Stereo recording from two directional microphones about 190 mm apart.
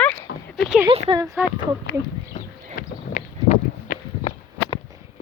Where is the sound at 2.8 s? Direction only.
45° left (ahead or behind).